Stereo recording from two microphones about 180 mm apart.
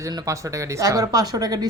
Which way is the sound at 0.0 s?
20° right (ahead or behind).